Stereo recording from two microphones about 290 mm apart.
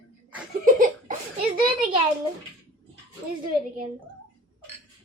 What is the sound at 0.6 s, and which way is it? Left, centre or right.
Laughter, right.